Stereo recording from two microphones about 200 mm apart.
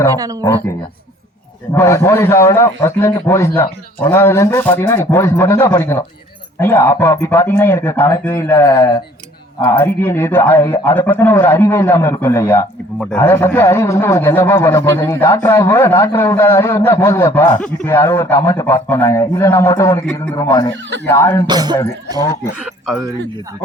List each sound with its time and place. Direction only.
1.7 s a man's voice: 10° left (ahead or behind)
21.4 s speech: 20° right (ahead or behind)